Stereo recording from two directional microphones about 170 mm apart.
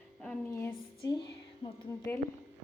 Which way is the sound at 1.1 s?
25° left (ahead or behind).